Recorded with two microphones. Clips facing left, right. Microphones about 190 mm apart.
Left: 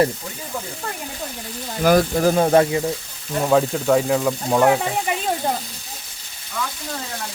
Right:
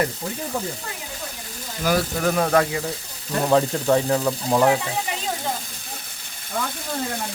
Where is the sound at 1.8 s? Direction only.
45° left (ahead or behind); by 2.8 s 25° left (ahead or behind).